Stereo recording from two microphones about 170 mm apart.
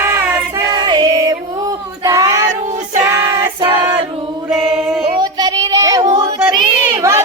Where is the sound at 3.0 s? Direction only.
20° right (ahead or behind).